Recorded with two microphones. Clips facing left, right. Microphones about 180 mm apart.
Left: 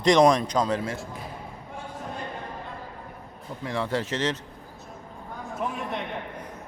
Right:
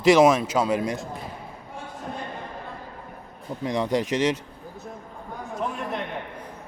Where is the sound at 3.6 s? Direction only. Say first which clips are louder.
Right 4 dB; 15° right (ahead or behind).